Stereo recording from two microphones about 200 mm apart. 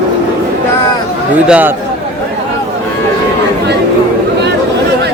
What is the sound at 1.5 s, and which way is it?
Speech, 10° right (ahead or behind).